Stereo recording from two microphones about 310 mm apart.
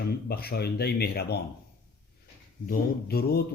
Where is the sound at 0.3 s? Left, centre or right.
Left.